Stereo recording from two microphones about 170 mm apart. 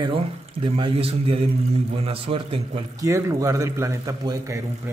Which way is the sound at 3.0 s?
20° right (ahead or behind).